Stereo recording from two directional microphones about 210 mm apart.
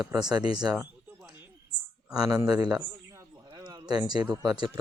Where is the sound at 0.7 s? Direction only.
10° right (ahead or behind).